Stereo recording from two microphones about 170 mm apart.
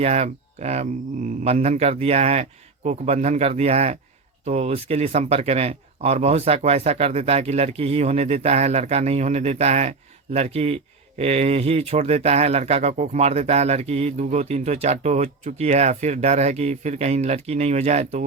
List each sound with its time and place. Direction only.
0.0 s speech: 40° right (ahead or behind)